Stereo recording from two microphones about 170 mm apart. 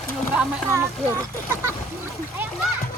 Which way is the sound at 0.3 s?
15° right (ahead or behind).